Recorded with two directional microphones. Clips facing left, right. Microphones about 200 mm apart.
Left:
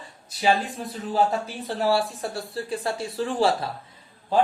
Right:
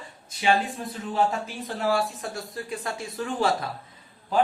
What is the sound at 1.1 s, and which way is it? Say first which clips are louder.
Speech: left 2 dB; 35° left (ahead or behind).